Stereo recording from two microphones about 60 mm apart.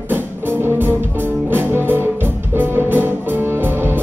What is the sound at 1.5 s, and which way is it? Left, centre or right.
Music, right.